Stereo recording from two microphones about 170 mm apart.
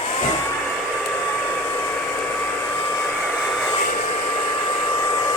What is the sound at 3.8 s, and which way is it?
Hair dryer, 45° left (ahead or behind).